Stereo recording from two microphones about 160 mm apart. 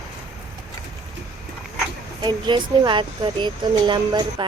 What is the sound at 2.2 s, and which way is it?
Speech, 30° right (ahead or behind).